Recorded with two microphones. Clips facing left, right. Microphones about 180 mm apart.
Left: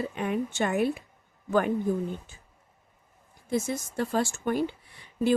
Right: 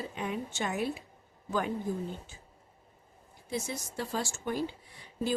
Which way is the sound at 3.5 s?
50° left (ahead or behind).